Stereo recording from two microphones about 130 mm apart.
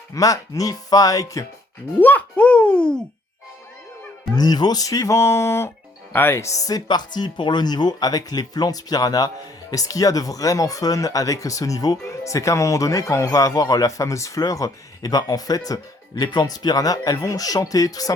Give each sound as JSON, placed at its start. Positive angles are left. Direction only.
{"t": 0.1, "sound": "speech", "side_deg": 25}
{"t": 2.0, "sound": "speech", "side_deg": 15}
{"t": 4.4, "sound": "speech", "side_deg": 30}